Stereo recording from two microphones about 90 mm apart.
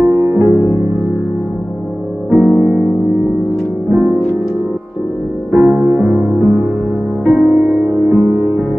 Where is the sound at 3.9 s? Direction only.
20° right (ahead or behind).